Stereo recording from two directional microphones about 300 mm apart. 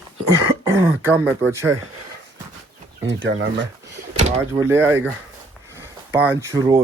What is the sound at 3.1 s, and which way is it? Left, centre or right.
Speech, right.